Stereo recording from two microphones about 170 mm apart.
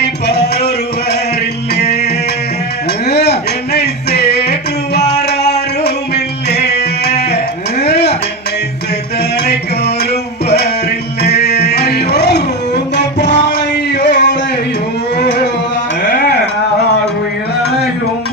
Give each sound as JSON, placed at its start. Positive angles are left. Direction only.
{"t": 3.1, "sound": "a sound", "side_deg": 75}
{"t": 5.0, "sound": "music", "side_deg": 75}
{"t": 7.3, "sound": "sheep", "side_deg": 40}
{"t": 7.9, "sound": "dishes", "side_deg": 80}
{"t": 9.4, "sound": "music", "side_deg": 75}
{"t": 11.2, "sound": "a sound", "side_deg": 70}